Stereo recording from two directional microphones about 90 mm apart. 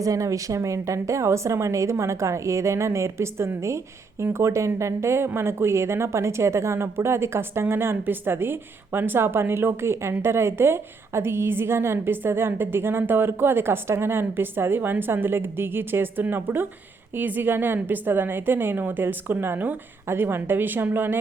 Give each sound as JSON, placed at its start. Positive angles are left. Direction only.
{"t": 0.0, "sound": "a woman's voice", "side_deg": -40}